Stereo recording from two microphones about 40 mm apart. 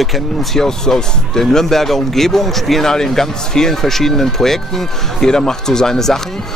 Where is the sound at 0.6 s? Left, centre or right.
Centre.